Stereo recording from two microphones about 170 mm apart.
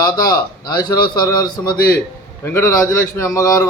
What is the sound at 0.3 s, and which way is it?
A man's voice, 25° left (ahead or behind).